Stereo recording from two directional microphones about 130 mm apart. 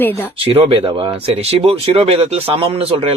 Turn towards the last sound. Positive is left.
turn(degrees=-45)  # may be behind; listen again after turning